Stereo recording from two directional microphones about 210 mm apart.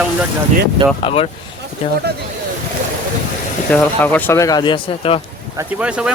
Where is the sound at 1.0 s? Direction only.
25° left (ahead or behind).